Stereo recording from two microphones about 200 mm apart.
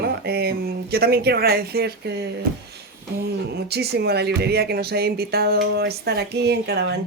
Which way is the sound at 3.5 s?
55° right (ahead or behind).